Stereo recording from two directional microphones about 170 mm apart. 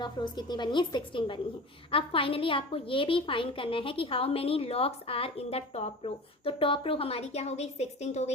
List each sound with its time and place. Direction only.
0.0 s a woman's voice: 25° left (ahead or behind); by 8.3 s 40° left (ahead or behind)